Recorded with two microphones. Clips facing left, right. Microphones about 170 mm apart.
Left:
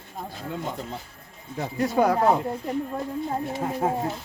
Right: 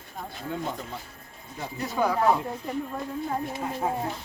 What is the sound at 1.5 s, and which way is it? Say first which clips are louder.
Speech: left 6 dB; 65° left (ahead or behind).